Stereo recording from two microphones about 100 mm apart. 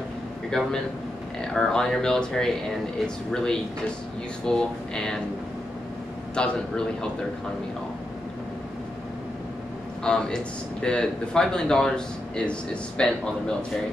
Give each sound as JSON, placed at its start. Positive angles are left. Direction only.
{"t": 0.5, "sound": "a man's voice", "side_deg": 5}
{"t": 6.3, "sound": "speech", "side_deg": 10}
{"t": 10.0, "sound": "speech", "side_deg": 5}